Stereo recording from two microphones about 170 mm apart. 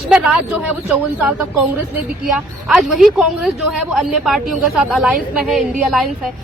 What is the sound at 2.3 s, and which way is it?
A woman's voice, centre (ahead or behind).